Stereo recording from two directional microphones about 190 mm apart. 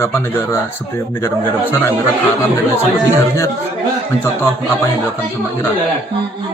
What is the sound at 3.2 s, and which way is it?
A man's voice, 15° left (ahead or behind).